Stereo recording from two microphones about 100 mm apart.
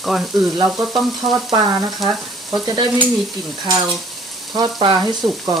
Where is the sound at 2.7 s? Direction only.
50° right (ahead or behind).